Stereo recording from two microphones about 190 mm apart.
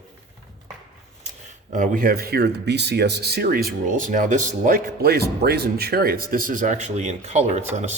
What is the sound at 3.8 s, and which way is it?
Speech, 45° right (ahead or behind).